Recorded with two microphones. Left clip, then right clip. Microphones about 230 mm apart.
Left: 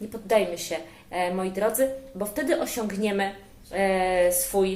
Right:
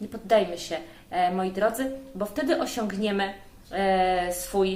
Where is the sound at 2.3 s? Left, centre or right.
Centre.